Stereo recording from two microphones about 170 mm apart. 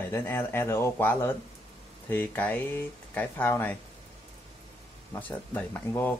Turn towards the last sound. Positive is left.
turn(degrees=10)  # may be behind; listen again after turning